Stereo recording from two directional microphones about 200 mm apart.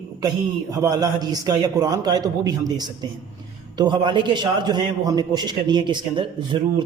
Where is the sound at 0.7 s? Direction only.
15° right (ahead or behind).